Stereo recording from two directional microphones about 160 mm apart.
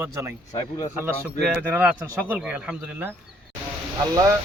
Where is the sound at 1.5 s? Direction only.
10° right (ahead or behind).